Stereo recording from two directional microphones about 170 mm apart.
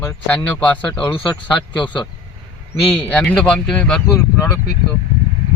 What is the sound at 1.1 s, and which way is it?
Speech, 25° left (ahead or behind).